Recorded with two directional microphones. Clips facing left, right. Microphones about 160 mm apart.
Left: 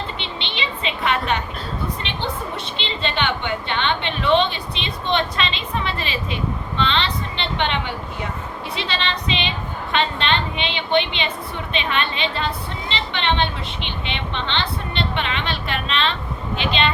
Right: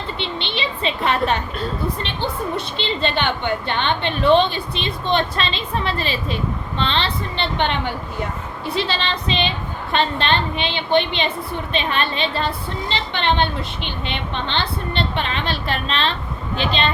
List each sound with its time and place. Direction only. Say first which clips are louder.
0.2 s a woman's voice: right 4 dB; 35° right (ahead or behind)
2.6 s a woman's voice: right 4 dB; 40° right (ahead or behind)